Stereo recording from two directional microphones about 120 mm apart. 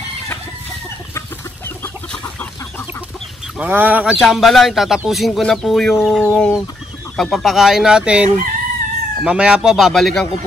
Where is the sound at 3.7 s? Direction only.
15° right (ahead or behind).